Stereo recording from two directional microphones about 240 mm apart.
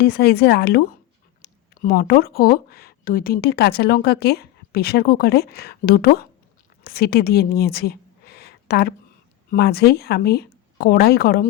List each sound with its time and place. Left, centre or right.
0.0 s a woman's voice: left